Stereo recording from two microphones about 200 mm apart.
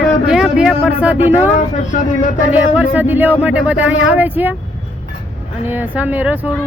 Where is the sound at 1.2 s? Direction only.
40° left (ahead or behind).